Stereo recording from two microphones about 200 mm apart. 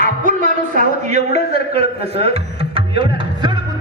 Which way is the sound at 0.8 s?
35° right (ahead or behind).